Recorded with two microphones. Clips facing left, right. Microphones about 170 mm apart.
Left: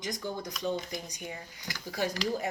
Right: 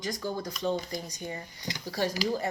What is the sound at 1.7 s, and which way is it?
Speech, 20° right (ahead or behind).